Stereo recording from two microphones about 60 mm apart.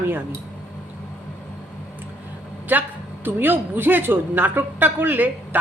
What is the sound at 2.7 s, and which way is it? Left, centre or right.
Speech, right.